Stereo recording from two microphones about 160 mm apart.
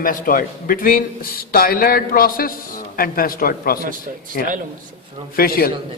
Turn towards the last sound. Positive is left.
turn(degrees=65)  # may be behind; listen again after turning